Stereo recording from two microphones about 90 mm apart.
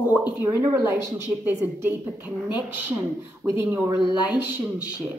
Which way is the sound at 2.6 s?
25° right (ahead or behind).